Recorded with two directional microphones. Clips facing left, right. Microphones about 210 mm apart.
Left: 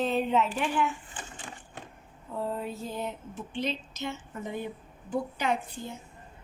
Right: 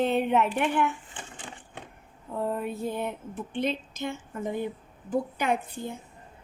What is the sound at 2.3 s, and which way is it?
A woman's voice, 60° right (ahead or behind).